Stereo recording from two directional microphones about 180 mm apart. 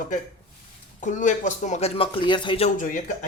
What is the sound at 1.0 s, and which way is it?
Speech, 45° left (ahead or behind).